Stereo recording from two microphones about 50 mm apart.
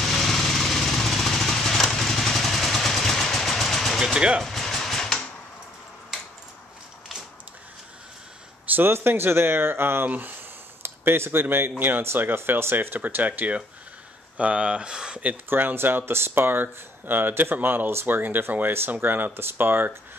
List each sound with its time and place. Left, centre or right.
0.0 s a sound: centre
4.0 s vehicle: centre
4.4 s vehicle: centre
8.7 s speech: right
10.0 s speech: right
10.8 s speech: right; by 15.2 s centre
15.5 s speech: right